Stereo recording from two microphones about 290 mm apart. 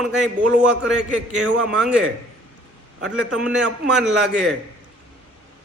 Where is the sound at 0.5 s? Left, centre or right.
Centre.